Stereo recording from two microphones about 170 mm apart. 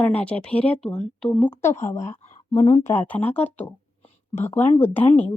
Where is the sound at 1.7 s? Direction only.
40° left (ahead or behind).